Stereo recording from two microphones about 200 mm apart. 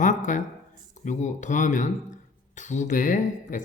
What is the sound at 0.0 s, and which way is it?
Speech, 40° left (ahead or behind).